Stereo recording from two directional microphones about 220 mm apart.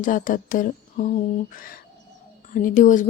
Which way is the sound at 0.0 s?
35° left (ahead or behind).